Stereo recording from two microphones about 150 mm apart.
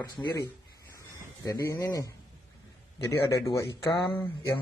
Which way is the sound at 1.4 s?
25° left (ahead or behind).